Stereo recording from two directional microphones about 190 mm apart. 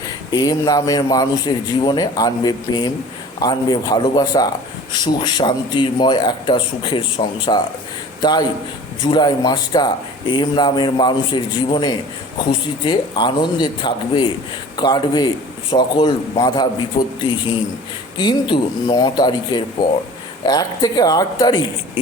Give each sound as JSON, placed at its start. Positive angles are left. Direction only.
{"t": 0.3, "sound": "speech", "side_deg": 20}
{"t": 18.2, "sound": "speech", "side_deg": 25}